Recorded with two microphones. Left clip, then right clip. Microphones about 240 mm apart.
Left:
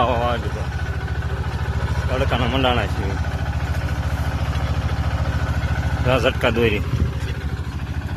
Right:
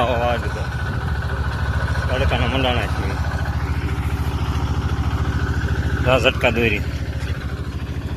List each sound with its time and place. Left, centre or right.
0.0 s vehicle: centre
2.0 s a man's voice: centre
6.1 s a man's voice: left